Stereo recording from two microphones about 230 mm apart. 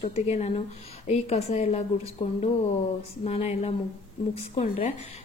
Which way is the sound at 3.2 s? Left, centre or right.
Left.